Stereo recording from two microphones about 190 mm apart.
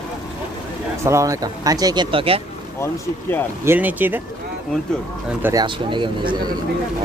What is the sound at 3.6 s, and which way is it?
Speech, 10° right (ahead or behind).